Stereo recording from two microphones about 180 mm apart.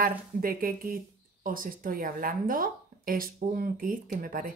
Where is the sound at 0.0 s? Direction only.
55° right (ahead or behind).